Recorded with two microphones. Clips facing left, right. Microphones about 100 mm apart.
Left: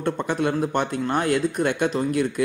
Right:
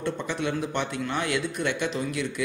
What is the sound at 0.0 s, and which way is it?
Speech, 50° left (ahead or behind).